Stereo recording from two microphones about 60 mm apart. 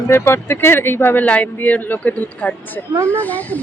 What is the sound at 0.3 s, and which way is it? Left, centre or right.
Speech, left.